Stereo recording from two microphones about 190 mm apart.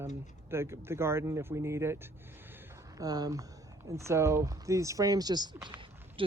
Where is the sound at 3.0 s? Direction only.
20° right (ahead or behind).